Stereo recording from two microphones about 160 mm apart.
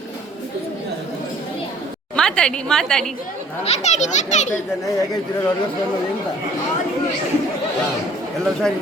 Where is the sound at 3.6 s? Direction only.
40° left (ahead or behind).